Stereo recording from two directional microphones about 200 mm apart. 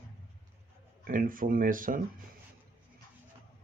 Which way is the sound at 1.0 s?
45° right (ahead or behind).